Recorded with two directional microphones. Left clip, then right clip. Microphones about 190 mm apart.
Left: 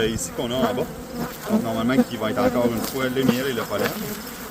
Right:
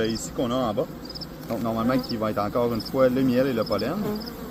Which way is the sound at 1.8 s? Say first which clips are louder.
Left 2 dB; 45° left (ahead or behind).